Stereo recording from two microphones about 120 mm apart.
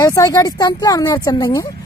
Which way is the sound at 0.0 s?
25° left (ahead or behind).